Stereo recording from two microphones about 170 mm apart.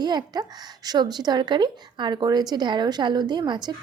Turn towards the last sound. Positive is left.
turn(degrees=-25)  # may be behind; listen again after turning